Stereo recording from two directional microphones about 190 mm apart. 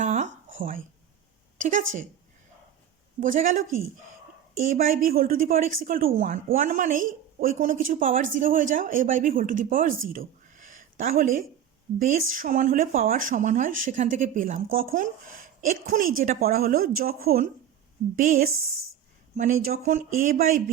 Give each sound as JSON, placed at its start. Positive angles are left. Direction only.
{"t": 0.0, "sound": "a sound", "side_deg": -40}
{"t": 3.2, "sound": "speech", "side_deg": -45}
{"t": 4.8, "sound": "speech", "side_deg": -50}
{"t": 19.6, "sound": "speech", "side_deg": -50}